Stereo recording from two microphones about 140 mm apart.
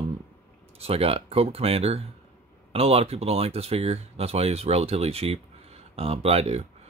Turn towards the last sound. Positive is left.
turn(degrees=-50)  # may be behind; listen again after turning